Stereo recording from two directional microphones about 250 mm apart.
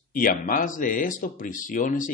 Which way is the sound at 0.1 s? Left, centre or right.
Left.